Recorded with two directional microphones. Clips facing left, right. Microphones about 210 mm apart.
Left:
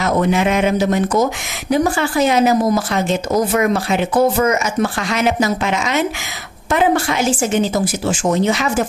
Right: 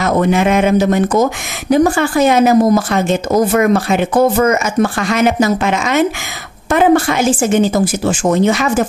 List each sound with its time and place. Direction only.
0.0 s speech: 50° right (ahead or behind)